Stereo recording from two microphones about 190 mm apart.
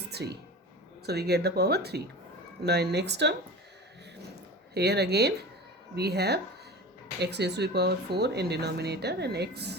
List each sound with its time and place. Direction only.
0.1 s a sound: 60° right (ahead or behind)
1.0 s speech: 60° right (ahead or behind)
4.7 s speech: 60° right (ahead or behind)